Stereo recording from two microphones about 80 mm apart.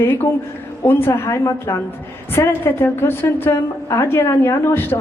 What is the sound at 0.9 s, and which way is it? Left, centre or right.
A woman's voice, left.